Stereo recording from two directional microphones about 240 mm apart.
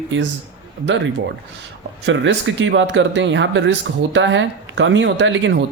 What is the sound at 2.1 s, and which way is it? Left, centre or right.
Speech, right.